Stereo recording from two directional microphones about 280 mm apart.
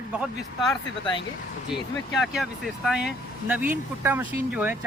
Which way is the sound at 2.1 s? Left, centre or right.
Centre.